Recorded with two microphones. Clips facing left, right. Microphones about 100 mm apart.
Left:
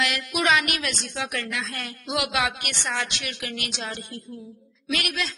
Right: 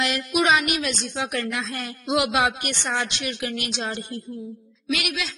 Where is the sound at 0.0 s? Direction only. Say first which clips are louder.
Right 3 dB; 25° right (ahead or behind).